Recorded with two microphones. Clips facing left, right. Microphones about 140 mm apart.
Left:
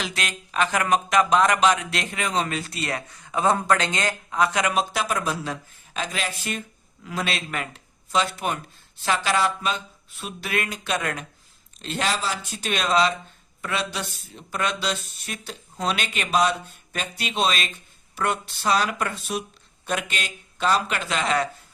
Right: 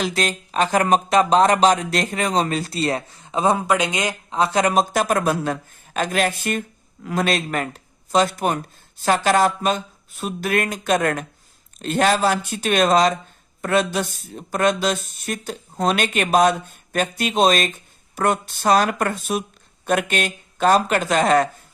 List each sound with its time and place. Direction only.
0.0 s speech: 35° right (ahead or behind); by 4.4 s 15° right (ahead or behind)
4.4 s speech: 30° right (ahead or behind)